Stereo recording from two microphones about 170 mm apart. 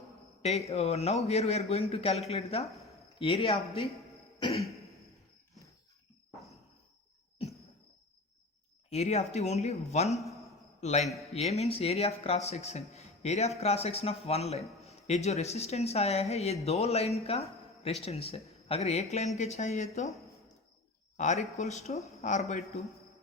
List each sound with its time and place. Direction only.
0.4 s a man's voice: 40° left (ahead or behind)
4.4 s throat clearing: 25° left (ahead or behind)
8.9 s a man's voice: 40° left (ahead or behind)
21.2 s a man's voice: 40° left (ahead or behind)